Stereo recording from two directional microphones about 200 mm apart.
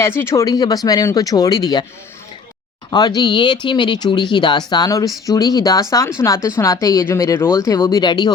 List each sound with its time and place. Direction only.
0.0 s speech: 10° left (ahead or behind)
2.9 s speech: 20° left (ahead or behind)